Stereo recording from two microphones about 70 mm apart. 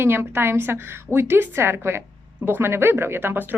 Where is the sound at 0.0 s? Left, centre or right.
Right.